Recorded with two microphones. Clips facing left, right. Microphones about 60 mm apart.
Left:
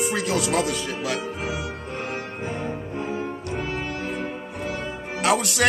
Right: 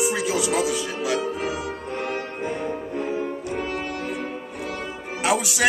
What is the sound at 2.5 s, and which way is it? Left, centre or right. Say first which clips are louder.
Music: right 2 dB; left.